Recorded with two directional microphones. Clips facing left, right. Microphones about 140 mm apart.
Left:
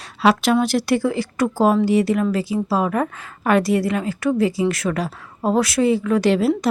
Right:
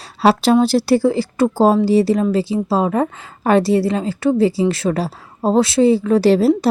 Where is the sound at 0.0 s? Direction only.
35° right (ahead or behind).